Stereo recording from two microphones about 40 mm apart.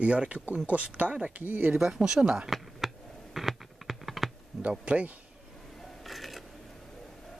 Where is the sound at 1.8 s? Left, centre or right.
Centre.